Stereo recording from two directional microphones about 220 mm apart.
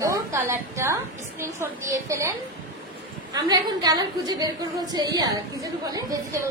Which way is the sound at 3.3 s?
15° right (ahead or behind).